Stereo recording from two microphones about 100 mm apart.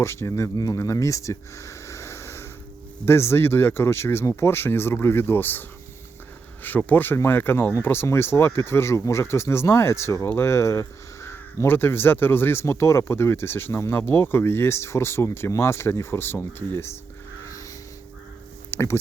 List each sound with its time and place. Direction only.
0.0 s speech: 30° left (ahead or behind)
18.7 s speech: 25° left (ahead or behind)